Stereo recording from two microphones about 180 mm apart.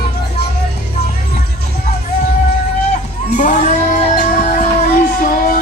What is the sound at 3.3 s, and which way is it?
Music, 45° left (ahead or behind).